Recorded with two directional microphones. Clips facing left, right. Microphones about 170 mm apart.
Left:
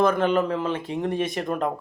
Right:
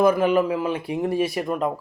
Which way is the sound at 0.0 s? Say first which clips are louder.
Right 3 dB; 10° right (ahead or behind).